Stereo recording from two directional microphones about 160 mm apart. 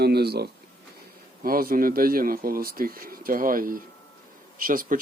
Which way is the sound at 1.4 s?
65° right (ahead or behind).